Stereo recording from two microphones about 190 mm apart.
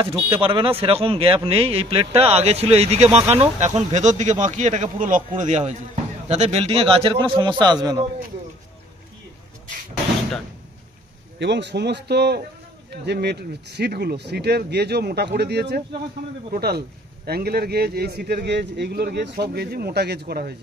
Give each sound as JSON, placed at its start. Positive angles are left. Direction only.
{"t": 0.0, "sound": "a man's voice", "side_deg": -25}
{"t": 11.3, "sound": "a man's voice", "side_deg": -65}